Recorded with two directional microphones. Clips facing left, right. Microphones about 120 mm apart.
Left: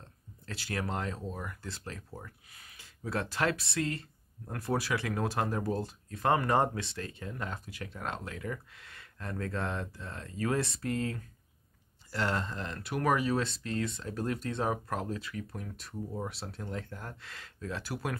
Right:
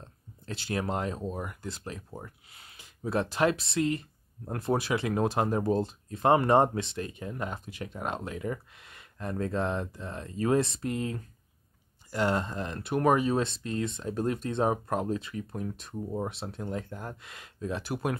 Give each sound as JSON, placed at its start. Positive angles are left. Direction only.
{"t": 0.0, "sound": "speech", "side_deg": -20}